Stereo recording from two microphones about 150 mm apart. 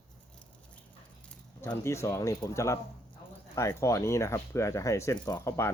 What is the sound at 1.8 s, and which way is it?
Speech, 20° left (ahead or behind).